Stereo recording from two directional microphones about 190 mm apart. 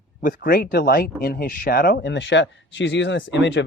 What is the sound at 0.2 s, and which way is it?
Speech, 45° left (ahead or behind).